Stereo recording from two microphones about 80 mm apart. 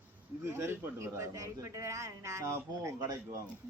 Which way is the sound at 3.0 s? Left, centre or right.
Right.